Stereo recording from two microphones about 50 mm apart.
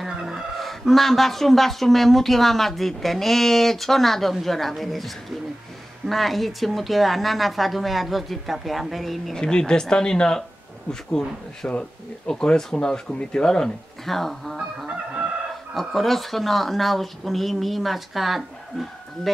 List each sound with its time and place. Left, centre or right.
0.1 s speech: centre
9.4 s speech: centre
14.0 s speech: centre